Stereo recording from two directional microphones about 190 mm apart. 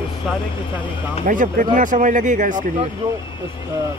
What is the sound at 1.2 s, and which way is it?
Speech, 45° right (ahead or behind).